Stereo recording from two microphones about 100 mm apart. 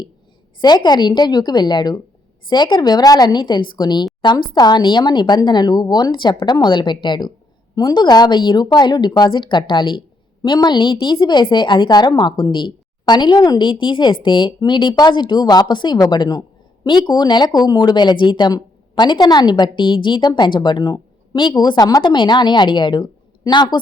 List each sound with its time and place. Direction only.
0.6 s speech: 45° left (ahead or behind)